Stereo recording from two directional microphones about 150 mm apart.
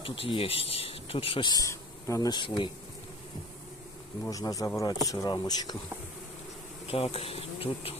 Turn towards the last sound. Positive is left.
turn(degrees=40)  # may be behind; listen again after turning